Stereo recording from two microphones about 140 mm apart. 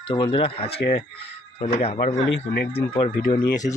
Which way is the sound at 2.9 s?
35° left (ahead or behind).